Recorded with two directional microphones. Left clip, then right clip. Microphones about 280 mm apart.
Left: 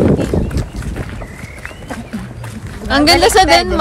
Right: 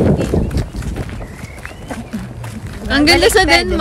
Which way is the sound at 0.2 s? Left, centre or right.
Centre.